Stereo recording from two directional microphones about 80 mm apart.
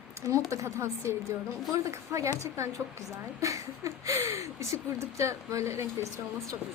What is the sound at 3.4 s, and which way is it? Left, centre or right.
A woman's voice, right.